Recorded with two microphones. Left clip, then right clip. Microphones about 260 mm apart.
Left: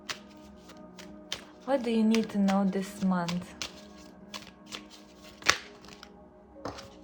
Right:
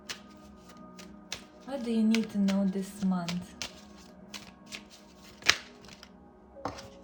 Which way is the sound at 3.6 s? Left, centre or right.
Centre.